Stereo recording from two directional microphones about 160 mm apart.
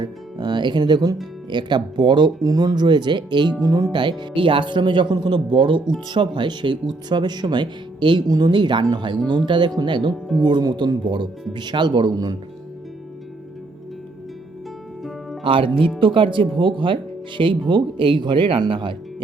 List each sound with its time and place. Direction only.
0.0 s speech: 25° right (ahead or behind)
15.4 s speech: 35° right (ahead or behind)